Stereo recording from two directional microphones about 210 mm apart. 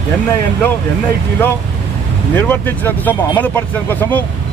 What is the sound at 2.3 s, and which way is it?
Speech, 10° left (ahead or behind).